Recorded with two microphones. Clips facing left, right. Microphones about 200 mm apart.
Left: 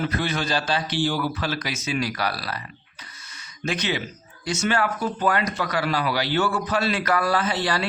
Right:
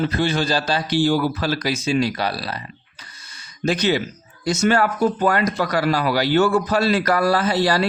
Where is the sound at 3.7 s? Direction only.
35° right (ahead or behind).